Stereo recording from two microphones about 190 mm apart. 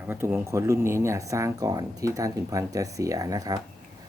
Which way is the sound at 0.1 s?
10° right (ahead or behind).